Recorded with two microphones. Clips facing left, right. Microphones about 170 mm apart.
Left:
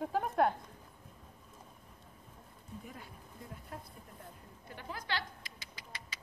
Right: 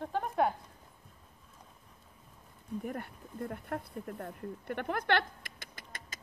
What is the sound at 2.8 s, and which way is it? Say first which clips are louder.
Speech: right 10 dB; 60° right (ahead or behind).